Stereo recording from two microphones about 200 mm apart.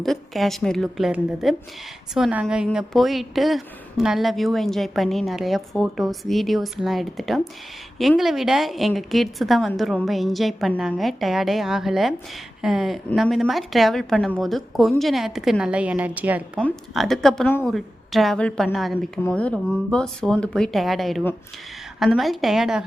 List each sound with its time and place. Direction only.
0.0 s a woman's voice: centre (ahead or behind)
16.6 s a woman's voice: 5° left (ahead or behind)